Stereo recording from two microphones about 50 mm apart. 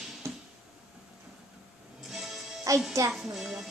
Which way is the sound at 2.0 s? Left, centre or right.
Centre.